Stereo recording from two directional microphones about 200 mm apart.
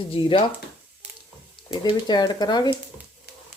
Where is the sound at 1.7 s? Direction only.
20° left (ahead or behind).